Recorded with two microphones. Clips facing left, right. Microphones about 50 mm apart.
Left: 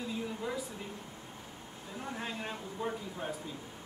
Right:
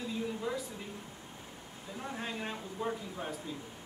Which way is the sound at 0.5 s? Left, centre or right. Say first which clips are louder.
Right 1 dB; left.